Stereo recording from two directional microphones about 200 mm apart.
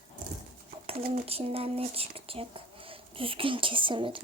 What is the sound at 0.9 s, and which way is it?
Speech, 30° right (ahead or behind).